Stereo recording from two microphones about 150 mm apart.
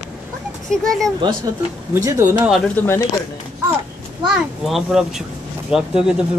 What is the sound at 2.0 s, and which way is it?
Speech, 20° right (ahead or behind).